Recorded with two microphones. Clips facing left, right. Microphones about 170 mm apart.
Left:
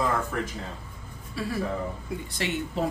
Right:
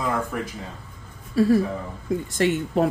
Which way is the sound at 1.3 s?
40° right (ahead or behind).